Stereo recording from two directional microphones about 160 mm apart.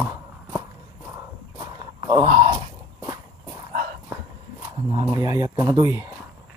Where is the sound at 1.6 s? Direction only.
30° right (ahead or behind).